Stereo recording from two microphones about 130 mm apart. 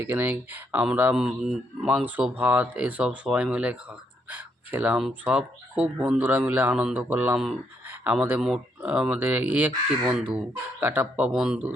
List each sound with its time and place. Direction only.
0.0 s speech: 15° right (ahead or behind)